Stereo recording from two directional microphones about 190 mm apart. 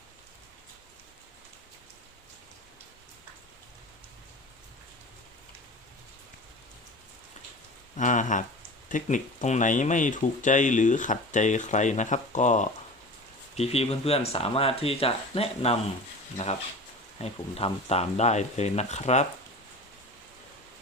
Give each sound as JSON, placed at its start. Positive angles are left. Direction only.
{"t": 7.9, "sound": "speech", "side_deg": 40}
{"t": 17.2, "sound": "speech", "side_deg": 30}